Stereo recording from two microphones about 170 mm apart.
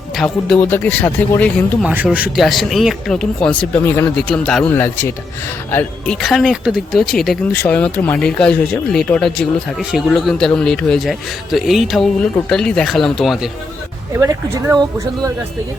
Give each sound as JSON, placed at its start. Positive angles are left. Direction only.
{"t": 0.2, "sound": "speech", "side_deg": 5}
{"t": 1.8, "sound": "speech", "side_deg": -10}
{"t": 5.7, "sound": "speech", "side_deg": 5}
{"t": 14.1, "sound": "speech", "side_deg": -15}